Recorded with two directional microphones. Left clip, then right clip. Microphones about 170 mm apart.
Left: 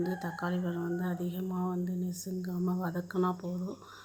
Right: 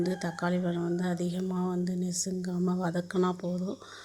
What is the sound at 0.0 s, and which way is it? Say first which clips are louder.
Speech: right 3 dB; 25° right (ahead or behind).